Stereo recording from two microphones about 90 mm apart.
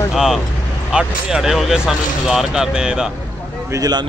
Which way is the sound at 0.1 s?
5° right (ahead or behind).